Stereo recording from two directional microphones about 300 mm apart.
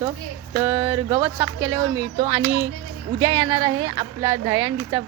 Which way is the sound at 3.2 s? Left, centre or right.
Centre.